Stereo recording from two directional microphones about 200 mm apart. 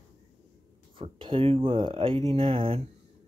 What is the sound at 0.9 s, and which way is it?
Speech, 25° right (ahead or behind).